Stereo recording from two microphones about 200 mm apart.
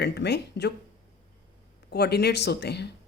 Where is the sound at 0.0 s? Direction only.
55° left (ahead or behind).